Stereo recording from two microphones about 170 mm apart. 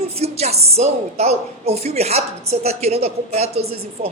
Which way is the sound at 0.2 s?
40° right (ahead or behind).